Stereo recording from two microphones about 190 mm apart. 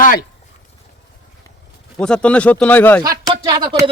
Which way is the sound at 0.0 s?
45° left (ahead or behind).